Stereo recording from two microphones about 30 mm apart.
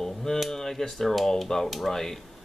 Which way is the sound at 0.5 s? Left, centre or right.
Centre.